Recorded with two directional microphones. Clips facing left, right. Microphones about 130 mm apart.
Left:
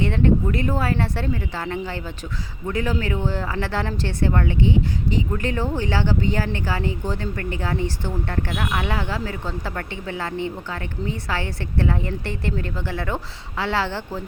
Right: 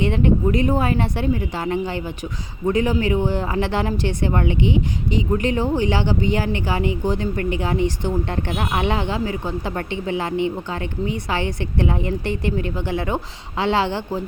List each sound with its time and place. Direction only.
0.0 s speech: 15° right (ahead or behind)